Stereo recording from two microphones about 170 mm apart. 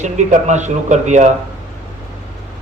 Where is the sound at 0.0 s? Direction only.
45° right (ahead or behind).